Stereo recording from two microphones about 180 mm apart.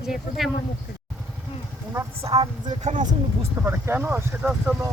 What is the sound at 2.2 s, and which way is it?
Speech, 35° right (ahead or behind).